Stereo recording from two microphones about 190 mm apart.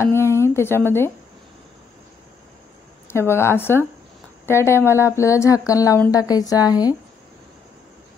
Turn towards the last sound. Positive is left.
turn(degrees=20)  # may be behind; listen again after turning